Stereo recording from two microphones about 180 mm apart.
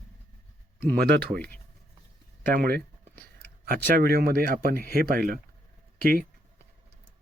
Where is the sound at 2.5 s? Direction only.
55° right (ahead or behind).